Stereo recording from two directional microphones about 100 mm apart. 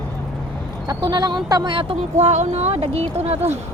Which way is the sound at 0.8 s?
45° right (ahead or behind).